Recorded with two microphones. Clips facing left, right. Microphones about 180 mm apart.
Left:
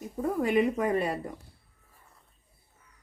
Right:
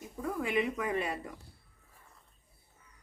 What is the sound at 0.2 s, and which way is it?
Speech, 40° left (ahead or behind).